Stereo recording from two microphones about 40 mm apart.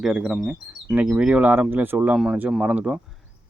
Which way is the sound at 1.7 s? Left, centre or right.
Right.